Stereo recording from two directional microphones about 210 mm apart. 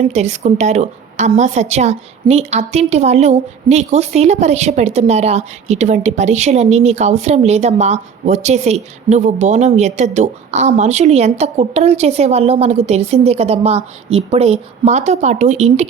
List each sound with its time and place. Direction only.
0.1 s a woman's voice: 30° right (ahead or behind)